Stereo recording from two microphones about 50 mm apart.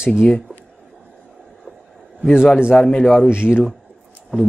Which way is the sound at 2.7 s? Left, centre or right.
Centre.